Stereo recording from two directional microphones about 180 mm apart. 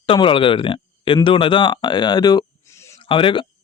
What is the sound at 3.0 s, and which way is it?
Speech, 30° left (ahead or behind).